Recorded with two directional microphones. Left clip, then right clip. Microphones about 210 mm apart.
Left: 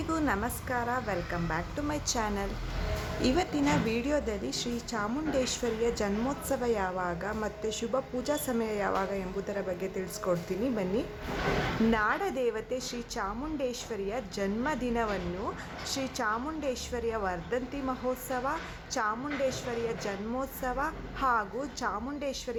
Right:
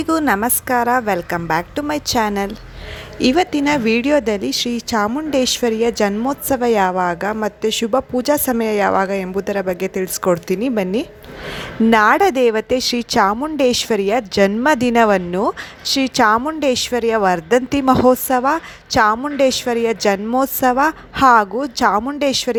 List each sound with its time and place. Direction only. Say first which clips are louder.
0.1 s a woman's voice: right 14 dB; 45° right (ahead or behind)